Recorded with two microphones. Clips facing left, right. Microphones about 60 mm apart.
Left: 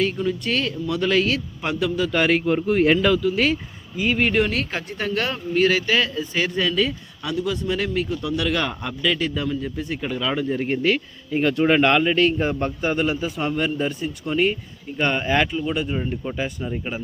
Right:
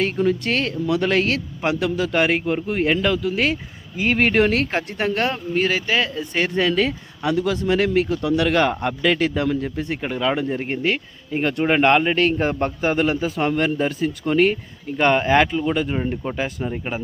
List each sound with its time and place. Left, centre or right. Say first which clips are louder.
0.0 s speech: right 3 dB; right
2.1 s a man's voice: left 1 dB; centre
3.3 s speech: even; right
3.9 s speech: right 2 dB; right
5.5 s a man's voice: left 2 dB; centre
6.1 s speech: right 2 dB; right
7.4 s speech: right 4 dB; right
7.8 s speech: right 5 dB; right
9.6 s speech: right 2 dB; right
12.1 s speech: even; right